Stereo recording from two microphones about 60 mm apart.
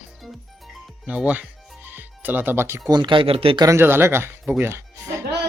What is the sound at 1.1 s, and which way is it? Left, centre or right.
Speech, right.